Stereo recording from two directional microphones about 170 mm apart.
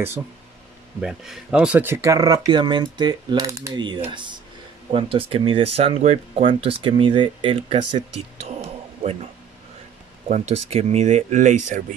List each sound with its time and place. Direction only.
1.0 s speech: 5° right (ahead or behind); by 7.8 s 30° right (ahead or behind)
9.0 s speech: 40° right (ahead or behind)